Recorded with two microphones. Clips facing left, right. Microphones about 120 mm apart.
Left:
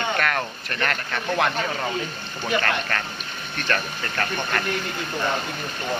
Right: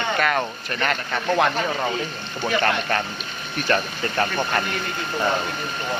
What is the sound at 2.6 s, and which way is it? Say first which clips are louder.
Speech: right 4 dB; 20° right (ahead or behind).